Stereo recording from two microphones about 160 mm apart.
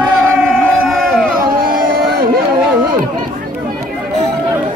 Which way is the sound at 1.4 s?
65° right (ahead or behind).